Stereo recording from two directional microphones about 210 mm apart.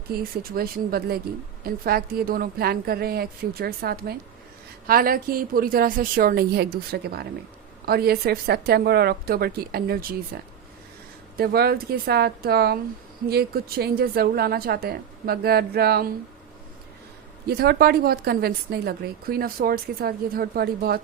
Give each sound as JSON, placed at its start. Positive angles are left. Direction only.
{"t": 0.1, "sound": "speech", "side_deg": -45}
{"t": 11.3, "sound": "speech", "side_deg": -45}
{"t": 17.4, "sound": "speech", "side_deg": -50}